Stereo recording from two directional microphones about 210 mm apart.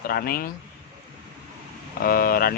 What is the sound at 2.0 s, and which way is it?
Speech, 45° left (ahead or behind).